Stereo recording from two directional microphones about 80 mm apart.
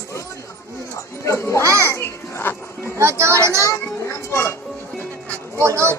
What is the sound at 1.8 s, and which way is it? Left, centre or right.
Children playing, left.